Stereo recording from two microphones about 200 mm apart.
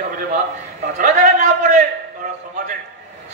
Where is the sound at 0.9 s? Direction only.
35° right (ahead or behind).